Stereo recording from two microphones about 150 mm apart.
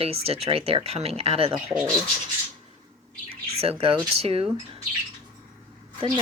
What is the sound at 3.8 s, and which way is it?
Speech, 40° right (ahead or behind).